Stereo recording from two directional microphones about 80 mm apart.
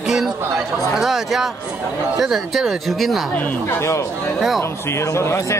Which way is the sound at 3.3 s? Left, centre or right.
Left.